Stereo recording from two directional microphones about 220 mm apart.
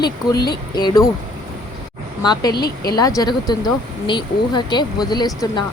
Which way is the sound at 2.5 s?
45° left (ahead or behind).